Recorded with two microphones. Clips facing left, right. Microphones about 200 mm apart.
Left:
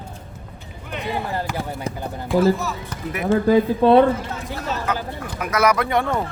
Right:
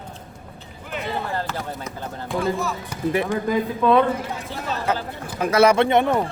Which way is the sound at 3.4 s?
30° left (ahead or behind).